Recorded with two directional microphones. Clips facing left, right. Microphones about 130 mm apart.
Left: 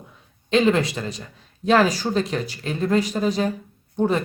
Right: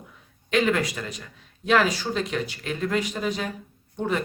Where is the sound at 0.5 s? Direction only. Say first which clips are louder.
Left 4 dB; 25° left (ahead or behind).